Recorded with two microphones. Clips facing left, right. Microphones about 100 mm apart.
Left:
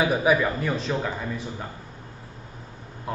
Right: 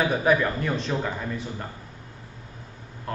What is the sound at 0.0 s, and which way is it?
Speech, 10° left (ahead or behind).